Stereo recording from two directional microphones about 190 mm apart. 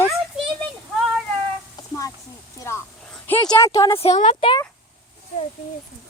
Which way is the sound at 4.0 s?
35° left (ahead or behind).